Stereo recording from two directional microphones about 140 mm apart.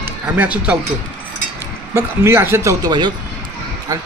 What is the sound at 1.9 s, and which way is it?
Speech, 20° right (ahead or behind).